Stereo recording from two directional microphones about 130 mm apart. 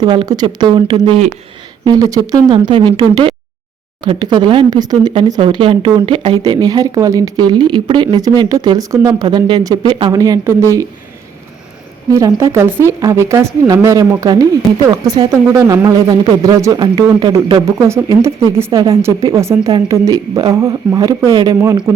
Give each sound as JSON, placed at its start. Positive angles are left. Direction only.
{"t": 0.0, "sound": "speech", "side_deg": -35}
{"t": 5.4, "sound": "speech", "side_deg": -40}
{"t": 10.2, "sound": "speech", "side_deg": -25}
{"t": 12.1, "sound": "speech", "side_deg": -25}
{"t": 17.7, "sound": "speech", "side_deg": -20}